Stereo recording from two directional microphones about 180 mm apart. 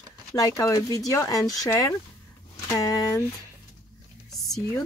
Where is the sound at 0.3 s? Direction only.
20° left (ahead or behind).